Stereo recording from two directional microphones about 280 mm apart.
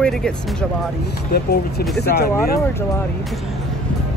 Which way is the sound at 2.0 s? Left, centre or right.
Left.